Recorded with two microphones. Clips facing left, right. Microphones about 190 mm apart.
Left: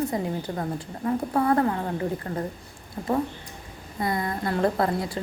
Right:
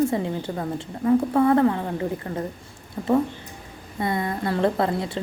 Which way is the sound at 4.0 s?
25° right (ahead or behind).